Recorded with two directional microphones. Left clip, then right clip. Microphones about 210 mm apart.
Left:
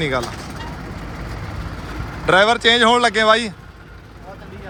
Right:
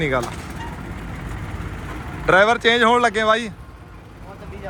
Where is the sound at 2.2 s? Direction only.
5° left (ahead or behind).